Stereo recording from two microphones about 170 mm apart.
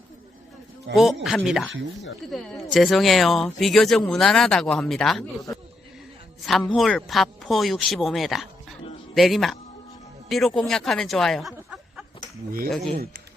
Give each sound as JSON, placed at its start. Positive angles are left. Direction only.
{"t": 0.9, "sound": "a man's voice", "side_deg": 0}